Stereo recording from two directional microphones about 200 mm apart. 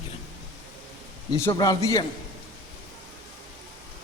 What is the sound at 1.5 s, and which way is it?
Speech, 15° left (ahead or behind).